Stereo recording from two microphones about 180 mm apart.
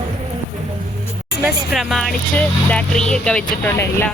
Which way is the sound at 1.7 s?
Centre (ahead or behind).